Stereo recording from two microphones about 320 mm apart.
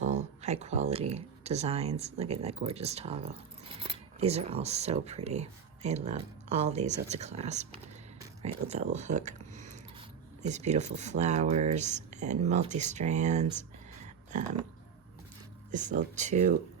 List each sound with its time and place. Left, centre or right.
0.0 s speech: right
15.7 s speech: right